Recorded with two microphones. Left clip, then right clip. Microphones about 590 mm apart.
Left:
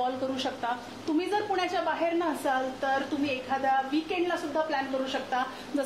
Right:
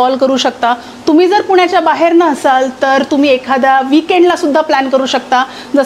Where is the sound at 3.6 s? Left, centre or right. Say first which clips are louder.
Right 15 dB; right.